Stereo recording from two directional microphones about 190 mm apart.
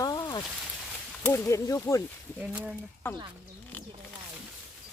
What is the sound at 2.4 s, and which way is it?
Speech, 5° right (ahead or behind).